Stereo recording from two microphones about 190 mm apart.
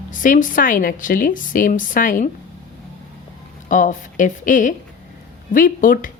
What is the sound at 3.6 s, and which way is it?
Speech, 40° left (ahead or behind).